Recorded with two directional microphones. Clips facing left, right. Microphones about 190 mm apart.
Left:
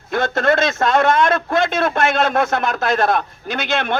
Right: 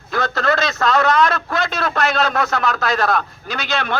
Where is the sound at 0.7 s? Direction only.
50° left (ahead or behind).